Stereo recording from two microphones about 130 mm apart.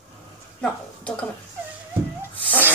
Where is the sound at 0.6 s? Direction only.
10° left (ahead or behind).